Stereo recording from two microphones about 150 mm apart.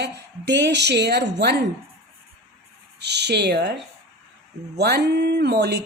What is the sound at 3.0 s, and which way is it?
Speech, 90° right.